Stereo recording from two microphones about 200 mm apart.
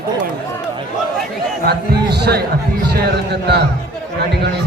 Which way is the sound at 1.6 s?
55° right (ahead or behind).